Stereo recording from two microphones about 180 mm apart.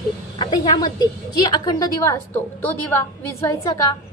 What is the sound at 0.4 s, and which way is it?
A woman's voice, 20° left (ahead or behind).